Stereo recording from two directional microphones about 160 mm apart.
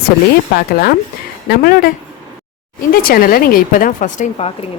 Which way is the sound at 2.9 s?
65° left (ahead or behind).